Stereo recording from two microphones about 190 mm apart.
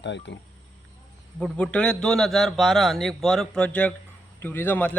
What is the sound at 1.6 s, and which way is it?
A man's voice, 5° left (ahead or behind).